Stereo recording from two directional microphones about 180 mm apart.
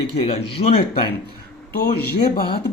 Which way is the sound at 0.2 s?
30° left (ahead or behind).